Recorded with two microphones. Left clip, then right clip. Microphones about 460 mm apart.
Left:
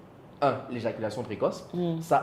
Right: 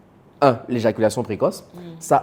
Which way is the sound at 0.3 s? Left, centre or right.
Right.